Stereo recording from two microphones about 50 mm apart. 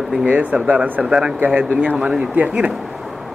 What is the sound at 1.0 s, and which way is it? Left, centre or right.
Speech, centre.